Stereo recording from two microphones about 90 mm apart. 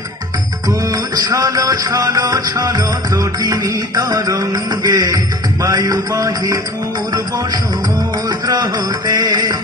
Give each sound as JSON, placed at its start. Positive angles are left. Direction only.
{"t": 0.7, "sound": "music", "side_deg": -45}
{"t": 8.3, "sound": "music", "side_deg": -50}